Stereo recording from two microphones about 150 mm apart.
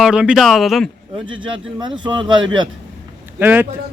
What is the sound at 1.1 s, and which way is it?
Speech, 35° right (ahead or behind).